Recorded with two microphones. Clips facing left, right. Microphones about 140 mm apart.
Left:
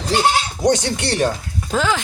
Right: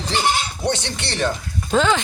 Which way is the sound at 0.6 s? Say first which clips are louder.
Left 8 dB; 45° left (ahead or behind).